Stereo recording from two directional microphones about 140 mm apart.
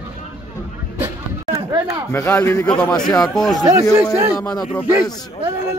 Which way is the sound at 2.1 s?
15° left (ahead or behind).